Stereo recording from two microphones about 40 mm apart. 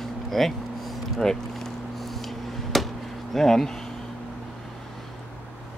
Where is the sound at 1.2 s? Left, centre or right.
Centre.